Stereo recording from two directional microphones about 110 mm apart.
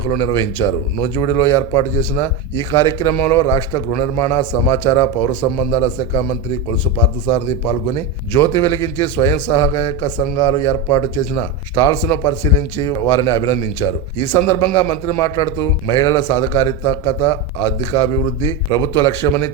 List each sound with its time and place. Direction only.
0.1 s a man's voice: 25° left (ahead or behind)
7.3 s a man's voice: 15° left (ahead or behind)